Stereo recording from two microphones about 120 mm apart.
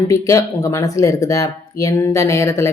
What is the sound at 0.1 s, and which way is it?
Speech, 25° left (ahead or behind).